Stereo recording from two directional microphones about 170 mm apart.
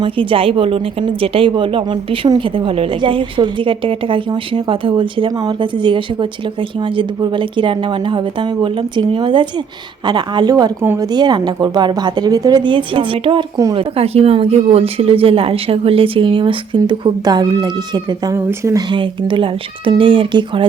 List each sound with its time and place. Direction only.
0.0 s speech: 30° right (ahead or behind); by 18.8 s 15° right (ahead or behind)
18.9 s speech: 30° right (ahead or behind)